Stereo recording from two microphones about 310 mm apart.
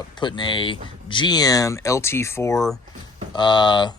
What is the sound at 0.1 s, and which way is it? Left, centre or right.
Speech, centre.